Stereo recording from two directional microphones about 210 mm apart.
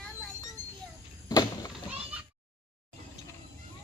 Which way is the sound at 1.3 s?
20° left (ahead or behind).